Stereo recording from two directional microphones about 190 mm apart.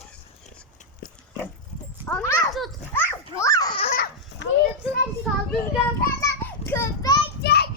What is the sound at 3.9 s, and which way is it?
Dog, 55° left (ahead or behind).